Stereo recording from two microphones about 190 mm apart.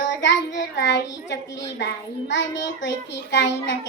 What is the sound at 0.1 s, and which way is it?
Child singing, 70° left (ahead or behind).